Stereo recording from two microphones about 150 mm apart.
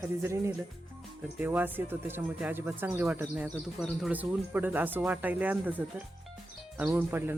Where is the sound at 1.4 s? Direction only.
10° right (ahead or behind).